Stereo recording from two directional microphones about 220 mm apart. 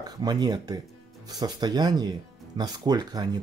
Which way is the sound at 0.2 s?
20° right (ahead or behind).